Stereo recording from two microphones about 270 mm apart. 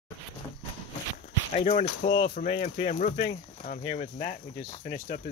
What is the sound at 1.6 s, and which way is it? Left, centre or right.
Speech, left.